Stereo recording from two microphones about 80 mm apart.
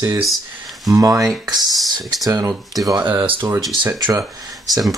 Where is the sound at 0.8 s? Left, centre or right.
Right.